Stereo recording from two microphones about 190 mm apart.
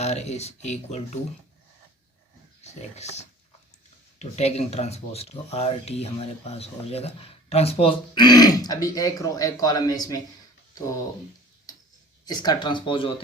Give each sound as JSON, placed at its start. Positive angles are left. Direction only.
{"t": 0.0, "sound": "speech", "side_deg": 35}
{"t": 2.6, "sound": "speech", "side_deg": 35}
{"t": 12.2, "sound": "speech", "side_deg": 20}